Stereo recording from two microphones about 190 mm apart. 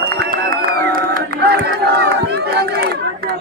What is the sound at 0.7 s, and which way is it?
Crowd, 50° right (ahead or behind).